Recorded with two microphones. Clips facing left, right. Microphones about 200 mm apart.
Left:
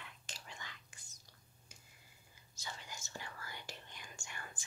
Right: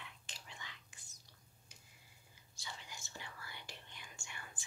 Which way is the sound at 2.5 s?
45° left (ahead or behind).